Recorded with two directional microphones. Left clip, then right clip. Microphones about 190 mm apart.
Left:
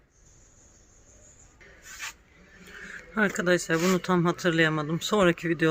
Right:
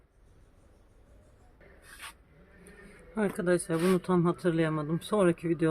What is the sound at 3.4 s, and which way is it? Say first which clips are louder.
Speech: left 1 dB; centre (ahead or behind).